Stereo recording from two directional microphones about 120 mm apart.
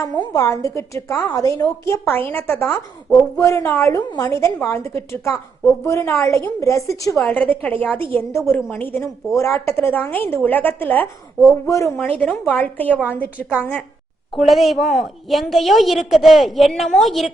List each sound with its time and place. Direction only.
0.2 s a woman's voice: 25° left (ahead or behind)
7.2 s a woman's voice: 15° left (ahead or behind)
11.6 s a woman's voice: 25° left (ahead or behind)
12.0 s a woman's voice: 15° left (ahead or behind)
14.3 s a woman's voice: centre (ahead or behind)